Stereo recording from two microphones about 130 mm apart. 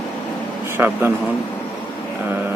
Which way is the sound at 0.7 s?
15° right (ahead or behind).